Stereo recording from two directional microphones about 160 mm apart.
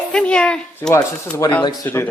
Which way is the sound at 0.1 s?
5° left (ahead or behind).